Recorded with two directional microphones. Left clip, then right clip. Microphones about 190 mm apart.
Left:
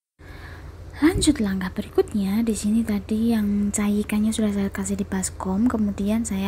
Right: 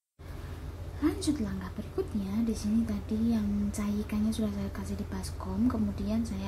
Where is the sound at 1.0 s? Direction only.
35° left (ahead or behind).